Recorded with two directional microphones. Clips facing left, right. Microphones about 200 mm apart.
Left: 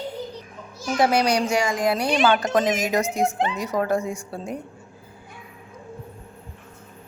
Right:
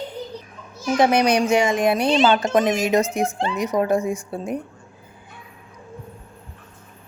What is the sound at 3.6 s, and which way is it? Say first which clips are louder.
Speech: right 6 dB; 20° right (ahead or behind).